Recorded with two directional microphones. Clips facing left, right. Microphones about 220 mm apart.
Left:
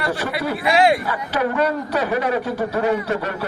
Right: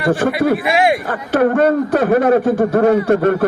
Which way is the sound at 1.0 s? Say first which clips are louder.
Right 7 dB; 50° right (ahead or behind).